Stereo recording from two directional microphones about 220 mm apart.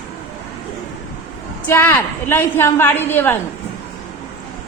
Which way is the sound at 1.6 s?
10° left (ahead or behind).